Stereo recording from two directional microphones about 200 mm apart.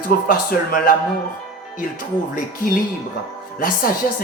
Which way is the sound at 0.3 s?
45° left (ahead or behind).